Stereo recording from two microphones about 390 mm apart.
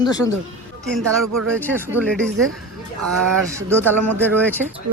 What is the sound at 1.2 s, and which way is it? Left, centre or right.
Speech, right.